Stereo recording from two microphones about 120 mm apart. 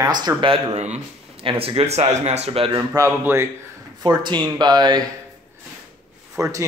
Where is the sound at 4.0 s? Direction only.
40° right (ahead or behind).